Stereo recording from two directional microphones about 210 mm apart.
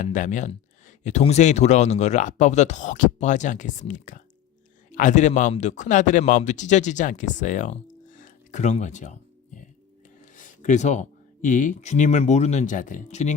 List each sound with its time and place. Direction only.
0.0 s speech: 35° left (ahead or behind)
10.2 s a sound: 40° left (ahead or behind)
11.4 s speech: 35° left (ahead or behind)